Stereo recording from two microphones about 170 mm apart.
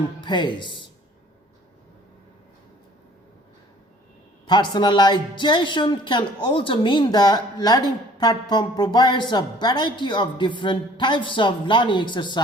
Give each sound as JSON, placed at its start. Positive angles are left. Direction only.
{"t": 0.2, "sound": "a woman's voice", "side_deg": 25}
{"t": 4.4, "sound": "a woman's voice", "side_deg": 25}